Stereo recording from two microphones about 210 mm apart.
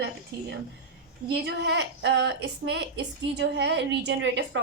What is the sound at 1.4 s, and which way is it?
A woman's voice, 55° right (ahead or behind).